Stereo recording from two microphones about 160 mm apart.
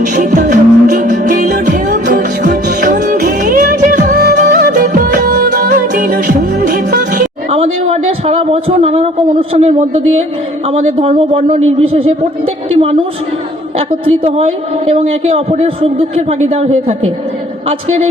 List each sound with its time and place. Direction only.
0.0 s music: 50° right (ahead or behind)
4.2 s music: 70° right (ahead or behind)
8.3 s a man's voice: 40° right (ahead or behind)
13.7 s a man's voice: 40° right (ahead or behind)